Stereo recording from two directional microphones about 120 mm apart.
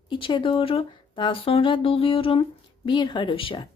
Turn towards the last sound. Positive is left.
turn(degrees=45)  # may be behind; listen again after turning